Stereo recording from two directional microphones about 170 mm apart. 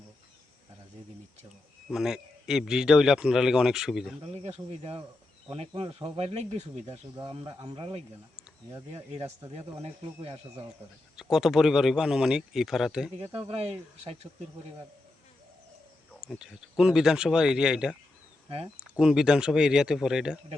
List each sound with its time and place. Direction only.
1.9 s a man's voice: 5° right (ahead or behind)
4.2 s speech: 40° right (ahead or behind)
11.2 s a man's voice: centre (ahead or behind)
16.4 s a man's voice: 5° right (ahead or behind)
18.4 s speech: 35° right (ahead or behind)
18.8 s a man's voice: 5° right (ahead or behind)